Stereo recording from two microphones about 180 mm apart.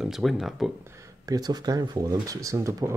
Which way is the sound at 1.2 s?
20° right (ahead or behind).